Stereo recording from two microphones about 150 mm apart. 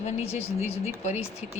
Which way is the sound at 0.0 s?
45° left (ahead or behind).